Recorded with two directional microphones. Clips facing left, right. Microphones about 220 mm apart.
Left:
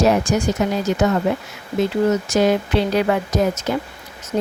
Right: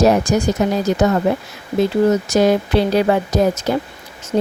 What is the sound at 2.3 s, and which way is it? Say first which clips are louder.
Speech: right 2 dB; 40° right (ahead or behind).